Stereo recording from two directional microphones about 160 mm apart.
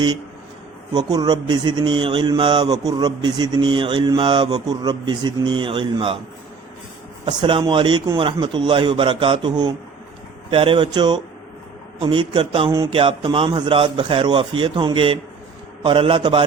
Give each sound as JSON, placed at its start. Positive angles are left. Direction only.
{"t": 0.9, "sound": "speech", "side_deg": -25}
{"t": 7.3, "sound": "a man's voice", "side_deg": -30}